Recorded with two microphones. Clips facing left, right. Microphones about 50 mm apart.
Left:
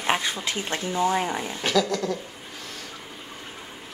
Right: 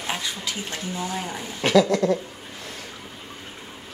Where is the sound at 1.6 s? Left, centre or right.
Centre.